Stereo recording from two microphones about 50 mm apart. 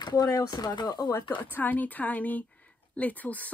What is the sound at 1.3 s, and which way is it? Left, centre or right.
A woman's voice, left.